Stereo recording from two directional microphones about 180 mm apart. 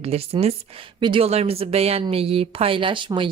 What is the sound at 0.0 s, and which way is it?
Speech, 35° right (ahead or behind).